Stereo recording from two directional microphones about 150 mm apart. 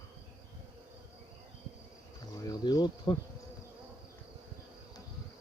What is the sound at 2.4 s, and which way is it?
Insect, 25° left (ahead or behind).